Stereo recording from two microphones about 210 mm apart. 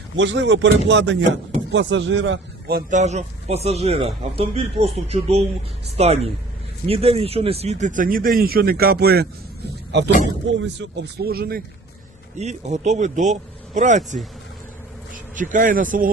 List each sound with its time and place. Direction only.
0.2 s speech: 60° right (ahead or behind)
3.0 s speech: 30° right (ahead or behind); by 9.2 s 50° right (ahead or behind)
10.5 s speech: 60° right (ahead or behind)
12.4 s speech: 30° right (ahead or behind)